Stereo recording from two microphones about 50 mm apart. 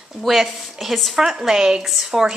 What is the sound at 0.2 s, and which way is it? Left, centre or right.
A woman's voice, centre.